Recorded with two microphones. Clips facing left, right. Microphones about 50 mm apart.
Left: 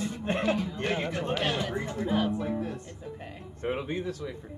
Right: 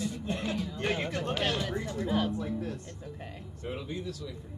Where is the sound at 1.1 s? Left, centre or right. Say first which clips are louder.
Left 2 dB; centre.